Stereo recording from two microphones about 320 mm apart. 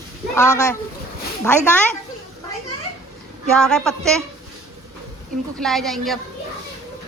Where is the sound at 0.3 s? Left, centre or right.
Centre.